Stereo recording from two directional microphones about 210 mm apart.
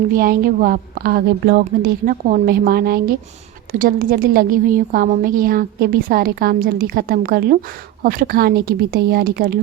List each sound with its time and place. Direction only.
0.1 s a woman's voice: 45° right (ahead or behind)